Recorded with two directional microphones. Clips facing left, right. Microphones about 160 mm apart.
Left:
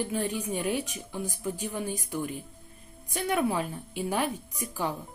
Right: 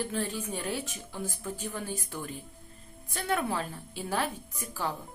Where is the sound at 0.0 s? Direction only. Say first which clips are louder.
Left 3 dB; 15° left (ahead or behind).